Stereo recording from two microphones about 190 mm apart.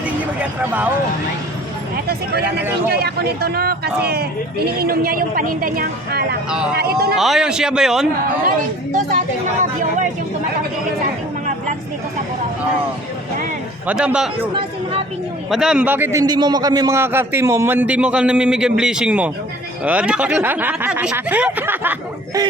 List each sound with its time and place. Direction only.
0.6 s a man's voice: 10° right (ahead or behind)
2.0 s speech: 55° right (ahead or behind)
7.2 s a man's voice: centre (ahead or behind)
13.8 s a man's voice: 5° right (ahead or behind)
15.4 s a man's voice: centre (ahead or behind)